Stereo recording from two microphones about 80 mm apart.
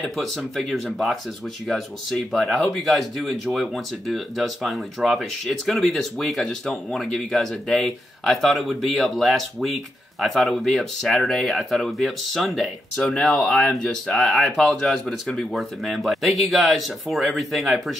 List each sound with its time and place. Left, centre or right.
0.0 s speech: centre